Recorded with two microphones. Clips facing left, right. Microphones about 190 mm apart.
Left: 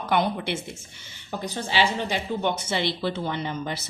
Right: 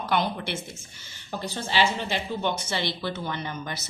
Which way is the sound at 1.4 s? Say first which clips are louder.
Left 1 dB; 15° left (ahead or behind).